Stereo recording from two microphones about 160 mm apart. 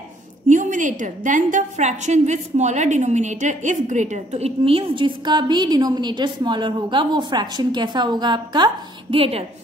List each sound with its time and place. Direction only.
0.5 s a woman's voice: 50° right (ahead or behind); by 9.4 s 35° right (ahead or behind)